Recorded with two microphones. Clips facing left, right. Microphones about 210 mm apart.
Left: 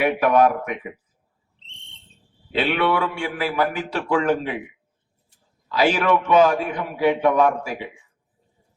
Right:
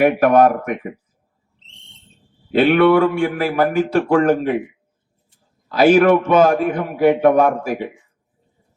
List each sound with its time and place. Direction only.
0.0 s a man's voice: 50° right (ahead or behind)
1.5 s whistle: 30° left (ahead or behind)
2.5 s a man's voice: 50° right (ahead or behind)
5.7 s a man's voice: 45° right (ahead or behind)